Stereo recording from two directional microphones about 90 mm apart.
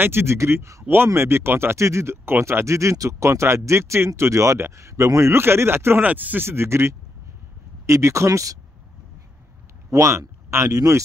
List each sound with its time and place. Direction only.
0.0 s speech: 25° right (ahead or behind)
9.8 s speech: 35° right (ahead or behind)